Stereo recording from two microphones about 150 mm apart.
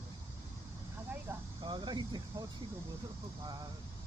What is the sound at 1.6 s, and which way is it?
Speech, 30° right (ahead or behind).